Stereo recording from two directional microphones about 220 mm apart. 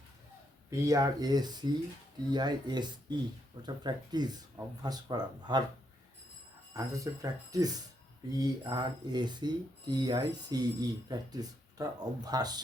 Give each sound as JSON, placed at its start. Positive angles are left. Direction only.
{"t": 0.7, "sound": "speech", "side_deg": -15}
{"t": 6.7, "sound": "speech", "side_deg": -15}